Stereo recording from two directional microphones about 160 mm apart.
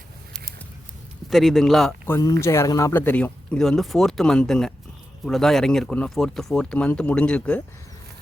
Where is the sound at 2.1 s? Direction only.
15° left (ahead or behind).